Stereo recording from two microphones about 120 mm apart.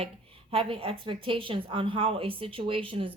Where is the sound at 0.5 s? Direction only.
50° right (ahead or behind).